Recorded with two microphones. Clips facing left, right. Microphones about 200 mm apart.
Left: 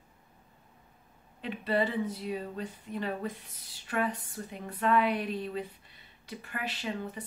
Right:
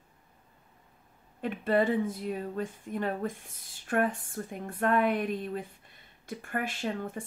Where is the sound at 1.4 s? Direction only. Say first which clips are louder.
Right 3 dB; 50° right (ahead or behind).